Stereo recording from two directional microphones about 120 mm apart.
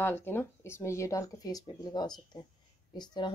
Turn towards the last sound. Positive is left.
turn(degrees=40)  # may be behind; listen again after turning